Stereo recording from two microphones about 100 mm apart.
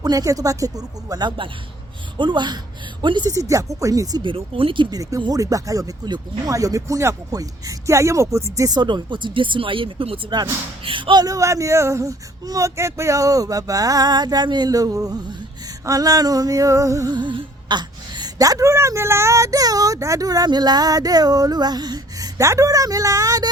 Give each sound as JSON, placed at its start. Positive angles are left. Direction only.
{"t": 0.0, "sound": "a woman's voice", "side_deg": -40}
{"t": 2.1, "sound": "a woman's voice", "side_deg": -50}
{"t": 3.2, "sound": "a woman's voice", "side_deg": -35}
{"t": 4.2, "sound": "speech", "side_deg": -60}
{"t": 5.3, "sound": "a woman's voice", "side_deg": -35}
{"t": 8.8, "sound": "a woman's voice", "side_deg": -50}
{"t": 17.2, "sound": "a woman's voice", "side_deg": -50}